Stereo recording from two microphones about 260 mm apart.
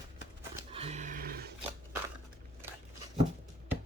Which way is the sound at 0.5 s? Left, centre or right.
Right.